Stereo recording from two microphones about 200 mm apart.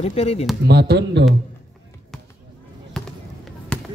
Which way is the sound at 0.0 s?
30° left (ahead or behind).